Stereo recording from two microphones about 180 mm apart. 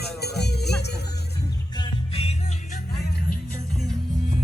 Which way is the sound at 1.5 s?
25° left (ahead or behind).